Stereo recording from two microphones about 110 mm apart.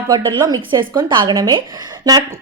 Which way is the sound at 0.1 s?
35° right (ahead or behind).